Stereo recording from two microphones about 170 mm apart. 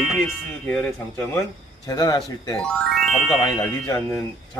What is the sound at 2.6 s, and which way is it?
Speech, centre (ahead or behind).